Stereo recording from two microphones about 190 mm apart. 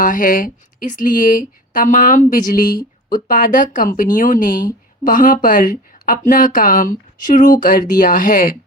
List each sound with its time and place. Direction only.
0.0 s speech: 45° left (ahead or behind)